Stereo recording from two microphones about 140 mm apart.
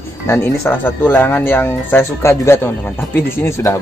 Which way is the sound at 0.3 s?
15° left (ahead or behind).